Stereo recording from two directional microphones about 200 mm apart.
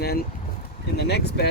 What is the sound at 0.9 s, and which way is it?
Speech, 55° left (ahead or behind).